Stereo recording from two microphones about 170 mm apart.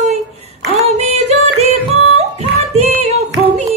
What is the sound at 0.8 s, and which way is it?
Music, 40° right (ahead or behind).